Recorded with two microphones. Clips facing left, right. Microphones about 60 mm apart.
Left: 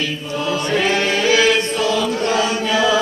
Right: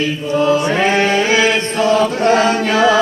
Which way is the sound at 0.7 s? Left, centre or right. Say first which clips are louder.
Right 4 dB; right.